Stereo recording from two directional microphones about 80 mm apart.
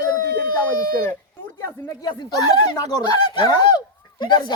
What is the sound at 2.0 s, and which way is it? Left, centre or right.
Speech, left.